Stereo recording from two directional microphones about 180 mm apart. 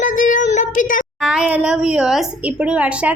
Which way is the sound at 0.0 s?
45° left (ahead or behind).